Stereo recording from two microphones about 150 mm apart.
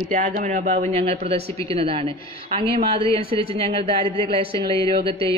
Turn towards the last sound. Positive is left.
turn(degrees=-40)  # may be behind; listen again after turning